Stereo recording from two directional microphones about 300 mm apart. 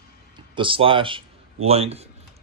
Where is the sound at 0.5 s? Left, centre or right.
Centre.